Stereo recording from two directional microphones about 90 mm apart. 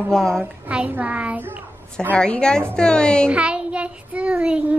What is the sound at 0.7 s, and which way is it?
Speech, 15° right (ahead or behind).